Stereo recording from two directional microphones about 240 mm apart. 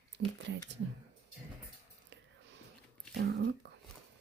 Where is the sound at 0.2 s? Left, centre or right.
Right.